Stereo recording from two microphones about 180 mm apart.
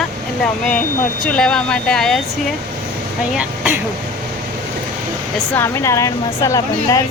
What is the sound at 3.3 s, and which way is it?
Speech, 10° right (ahead or behind).